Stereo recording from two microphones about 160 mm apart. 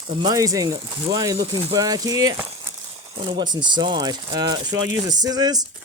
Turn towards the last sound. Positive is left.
turn(degrees=-25)  # may be behind; listen again after turning